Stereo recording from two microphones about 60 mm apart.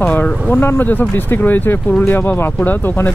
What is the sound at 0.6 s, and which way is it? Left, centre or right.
Speech, left.